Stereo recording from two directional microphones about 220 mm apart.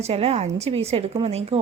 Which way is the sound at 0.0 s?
30° right (ahead or behind).